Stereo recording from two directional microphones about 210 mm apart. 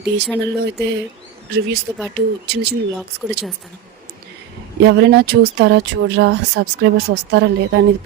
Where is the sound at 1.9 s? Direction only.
15° right (ahead or behind).